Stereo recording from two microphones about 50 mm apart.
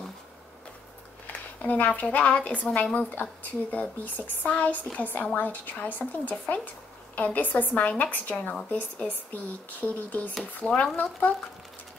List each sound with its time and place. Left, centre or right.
1.2 s a sound: left
2.0 s a woman's voice: left
10.6 s a woman's voice: left